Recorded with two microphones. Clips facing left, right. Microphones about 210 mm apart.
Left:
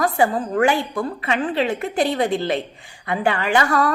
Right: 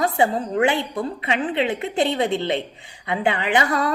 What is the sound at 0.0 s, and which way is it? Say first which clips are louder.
A woman's voice: left 1 dB; 25° right (ahead or behind).